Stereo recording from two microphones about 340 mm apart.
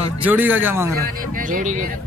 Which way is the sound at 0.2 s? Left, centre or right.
Centre.